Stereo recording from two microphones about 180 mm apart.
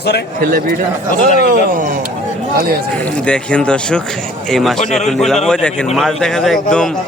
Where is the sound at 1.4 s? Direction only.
55° right (ahead or behind).